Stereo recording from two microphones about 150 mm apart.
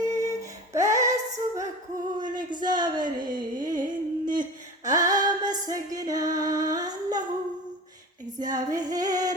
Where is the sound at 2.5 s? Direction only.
30° right (ahead or behind).